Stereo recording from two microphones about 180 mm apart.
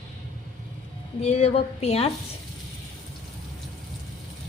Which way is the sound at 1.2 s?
35° left (ahead or behind).